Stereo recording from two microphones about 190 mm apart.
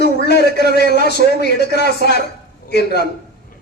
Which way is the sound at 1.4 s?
60° left (ahead or behind).